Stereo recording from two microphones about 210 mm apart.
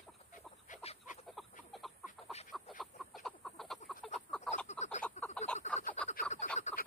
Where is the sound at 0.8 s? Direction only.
35° left (ahead or behind).